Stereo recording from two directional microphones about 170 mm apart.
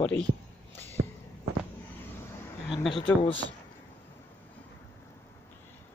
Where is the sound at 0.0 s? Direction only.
5° left (ahead or behind).